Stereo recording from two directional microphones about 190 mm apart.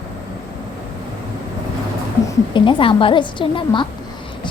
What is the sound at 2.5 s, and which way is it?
A woman's voice, 25° left (ahead or behind).